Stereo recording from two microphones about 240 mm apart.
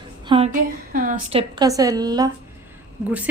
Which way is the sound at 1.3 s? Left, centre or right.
Centre.